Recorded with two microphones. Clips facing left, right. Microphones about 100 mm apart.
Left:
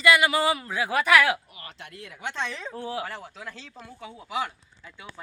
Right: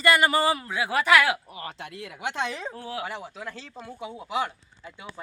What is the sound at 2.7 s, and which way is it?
Speech, 25° left (ahead or behind).